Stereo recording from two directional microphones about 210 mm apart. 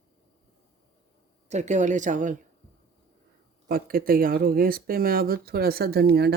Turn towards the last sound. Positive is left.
turn(degrees=-50)  # may be behind; listen again after turning